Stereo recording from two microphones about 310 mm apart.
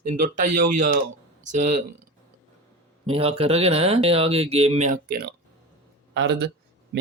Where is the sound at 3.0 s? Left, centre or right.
Centre.